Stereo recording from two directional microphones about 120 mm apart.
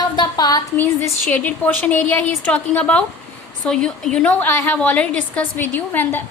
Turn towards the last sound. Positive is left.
turn(degrees=15)  # may be behind; listen again after turning